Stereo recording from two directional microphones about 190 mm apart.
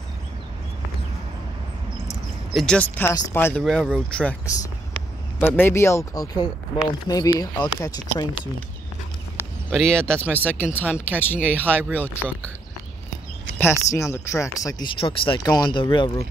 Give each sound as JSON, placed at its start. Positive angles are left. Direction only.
{"t": 2.5, "sound": "speech", "side_deg": 5}
{"t": 3.6, "sound": "speech", "side_deg": 0}
{"t": 5.4, "sound": "speech", "side_deg": 10}
{"t": 9.4, "sound": "a sound", "side_deg": 5}
{"t": 10.1, "sound": "speech", "side_deg": -10}
{"t": 10.4, "sound": "speech", "side_deg": 10}
{"t": 13.6, "sound": "speech", "side_deg": 15}